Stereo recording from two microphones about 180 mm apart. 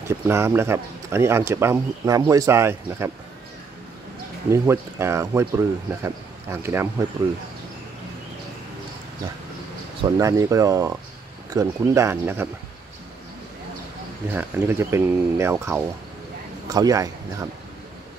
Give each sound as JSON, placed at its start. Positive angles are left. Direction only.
{"t": 0.1, "sound": "speech", "side_deg": -15}
{"t": 4.5, "sound": "speech", "side_deg": -15}
{"t": 10.0, "sound": "speech", "side_deg": -20}
{"t": 14.3, "sound": "speech", "side_deg": -10}